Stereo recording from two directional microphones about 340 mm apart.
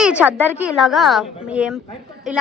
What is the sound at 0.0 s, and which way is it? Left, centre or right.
A woman's voice, centre.